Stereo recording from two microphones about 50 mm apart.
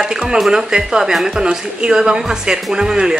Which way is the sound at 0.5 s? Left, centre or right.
Centre.